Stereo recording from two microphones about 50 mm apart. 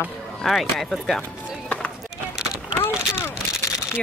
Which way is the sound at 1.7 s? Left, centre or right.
Left.